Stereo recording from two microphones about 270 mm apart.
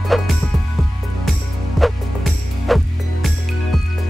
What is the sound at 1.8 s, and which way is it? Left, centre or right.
Music, centre.